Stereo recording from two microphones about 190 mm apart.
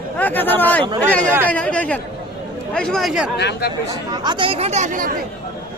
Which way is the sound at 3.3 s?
60° left (ahead or behind).